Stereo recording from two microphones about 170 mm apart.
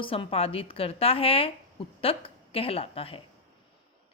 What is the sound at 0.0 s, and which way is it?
A woman's voice, 30° left (ahead or behind).